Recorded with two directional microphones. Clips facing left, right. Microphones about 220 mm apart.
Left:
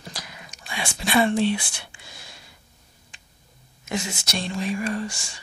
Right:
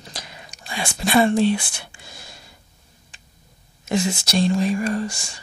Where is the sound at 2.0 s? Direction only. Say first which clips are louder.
Right 3 dB; 45° right (ahead or behind).